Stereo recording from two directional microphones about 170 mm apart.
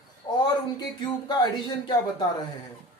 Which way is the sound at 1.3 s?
25° left (ahead or behind).